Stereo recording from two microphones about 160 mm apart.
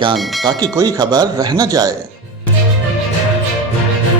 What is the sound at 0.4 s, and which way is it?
Speech, 25° right (ahead or behind).